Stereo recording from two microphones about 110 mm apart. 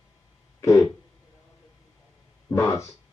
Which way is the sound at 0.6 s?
25° left (ahead or behind).